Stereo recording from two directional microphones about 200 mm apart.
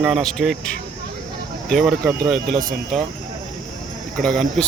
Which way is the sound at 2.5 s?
45° right (ahead or behind).